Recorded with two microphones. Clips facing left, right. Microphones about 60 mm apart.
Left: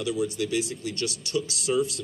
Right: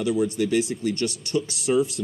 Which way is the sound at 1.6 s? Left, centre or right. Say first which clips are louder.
Right 4 dB; centre.